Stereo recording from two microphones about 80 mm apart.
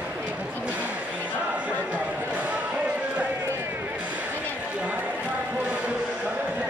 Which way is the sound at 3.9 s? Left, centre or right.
Centre.